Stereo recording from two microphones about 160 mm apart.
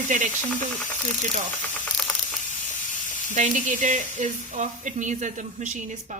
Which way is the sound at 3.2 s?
50° right (ahead or behind).